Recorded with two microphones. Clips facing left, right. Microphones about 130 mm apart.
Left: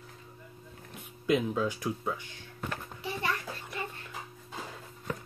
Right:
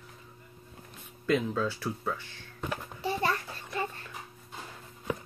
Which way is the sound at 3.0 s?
35° right (ahead or behind).